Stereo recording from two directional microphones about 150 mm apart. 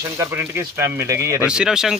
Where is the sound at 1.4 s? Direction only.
5° right (ahead or behind).